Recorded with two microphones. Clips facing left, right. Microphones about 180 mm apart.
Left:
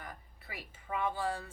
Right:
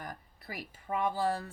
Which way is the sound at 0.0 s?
40° right (ahead or behind).